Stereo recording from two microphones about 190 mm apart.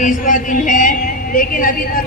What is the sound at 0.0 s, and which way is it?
A woman's voice, 45° left (ahead or behind).